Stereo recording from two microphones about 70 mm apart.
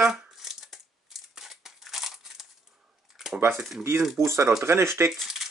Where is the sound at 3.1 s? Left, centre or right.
Centre.